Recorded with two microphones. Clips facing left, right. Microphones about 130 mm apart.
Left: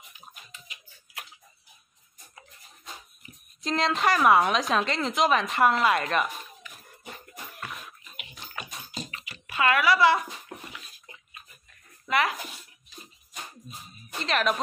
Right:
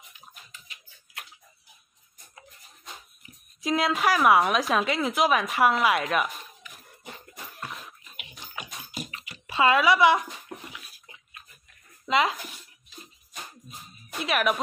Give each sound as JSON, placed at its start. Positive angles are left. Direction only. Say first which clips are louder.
{"t": 3.2, "sound": "a woman's voice", "louder": "left 1 dB", "side_deg": -5}
{"t": 8.5, "sound": "a sound", "louder": "even", "side_deg": -15}
{"t": 9.3, "sound": "speech", "louder": "right 3 dB", "side_deg": -20}
{"t": 10.7, "sound": "bathtub", "louder": "left 1 dB", "side_deg": -10}
{"t": 12.1, "sound": "a child's voice", "louder": "right 2 dB", "side_deg": -20}
{"t": 14.1, "sound": "speech", "louder": "right 1 dB", "side_deg": -10}